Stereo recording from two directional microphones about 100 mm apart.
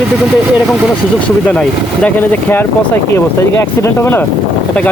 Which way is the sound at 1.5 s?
15° left (ahead or behind).